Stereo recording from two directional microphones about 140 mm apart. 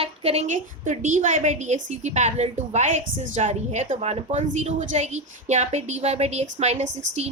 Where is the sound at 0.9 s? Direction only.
65° right (ahead or behind).